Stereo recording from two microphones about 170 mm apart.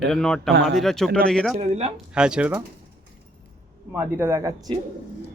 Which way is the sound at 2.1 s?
5° right (ahead or behind).